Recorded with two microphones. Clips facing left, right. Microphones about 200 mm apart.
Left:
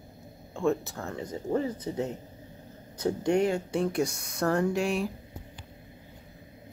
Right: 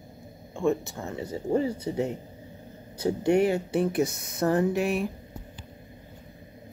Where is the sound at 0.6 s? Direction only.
Centre (ahead or behind).